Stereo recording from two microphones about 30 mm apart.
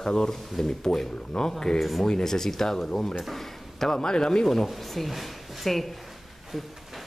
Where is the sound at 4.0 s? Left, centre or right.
Left.